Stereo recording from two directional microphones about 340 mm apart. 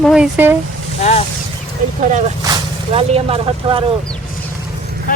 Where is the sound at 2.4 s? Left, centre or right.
Centre.